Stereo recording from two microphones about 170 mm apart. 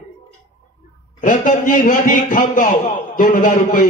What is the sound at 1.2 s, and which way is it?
A man's voice, 50° left (ahead or behind).